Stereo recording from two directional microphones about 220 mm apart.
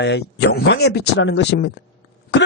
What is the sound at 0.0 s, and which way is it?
Speech, 50° left (ahead or behind).